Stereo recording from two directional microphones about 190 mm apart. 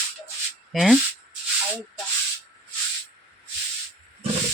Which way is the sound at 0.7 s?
Centre (ahead or behind).